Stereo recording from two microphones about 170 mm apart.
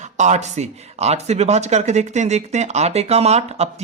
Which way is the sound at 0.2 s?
45° right (ahead or behind).